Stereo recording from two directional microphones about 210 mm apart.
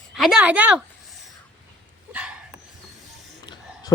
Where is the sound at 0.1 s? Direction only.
Centre (ahead or behind).